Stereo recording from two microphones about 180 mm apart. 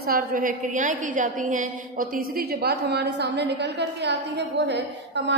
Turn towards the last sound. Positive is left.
turn(degrees=-75)  # may be behind; listen again after turning